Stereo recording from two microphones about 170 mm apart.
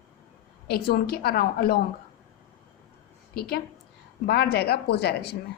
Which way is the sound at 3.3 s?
65° left (ahead or behind).